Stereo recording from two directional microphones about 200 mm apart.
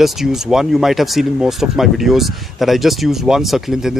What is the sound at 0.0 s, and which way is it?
Speech, centre (ahead or behind).